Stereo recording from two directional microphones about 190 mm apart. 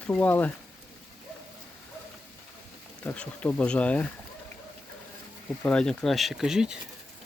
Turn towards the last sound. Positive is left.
turn(degrees=-5)  # may be behind; listen again after turning